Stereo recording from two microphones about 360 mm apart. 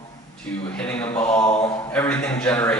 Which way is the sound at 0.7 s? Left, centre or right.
Centre.